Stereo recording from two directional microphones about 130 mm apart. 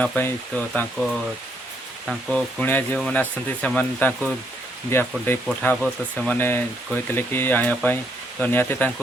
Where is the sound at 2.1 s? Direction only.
Centre (ahead or behind).